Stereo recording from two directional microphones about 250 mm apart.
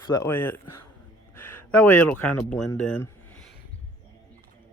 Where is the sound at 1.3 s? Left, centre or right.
Centre.